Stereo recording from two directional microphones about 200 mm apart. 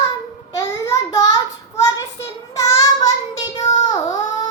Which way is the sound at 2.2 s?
15° left (ahead or behind).